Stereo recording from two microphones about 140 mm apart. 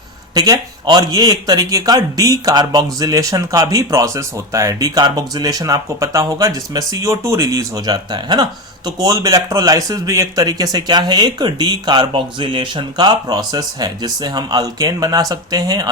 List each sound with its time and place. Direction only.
0.3 s speech: 25° right (ahead or behind)